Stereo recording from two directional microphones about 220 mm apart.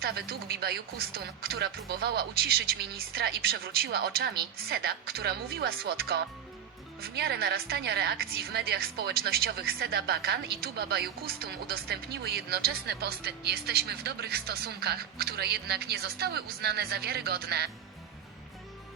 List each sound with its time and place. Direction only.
0.0 s a woman's voice: 45° right (ahead or behind)